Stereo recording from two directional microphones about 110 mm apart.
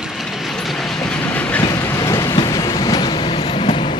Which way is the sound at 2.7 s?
35° left (ahead or behind).